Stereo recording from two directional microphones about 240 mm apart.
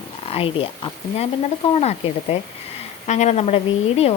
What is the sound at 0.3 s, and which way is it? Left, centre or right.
Speech, left.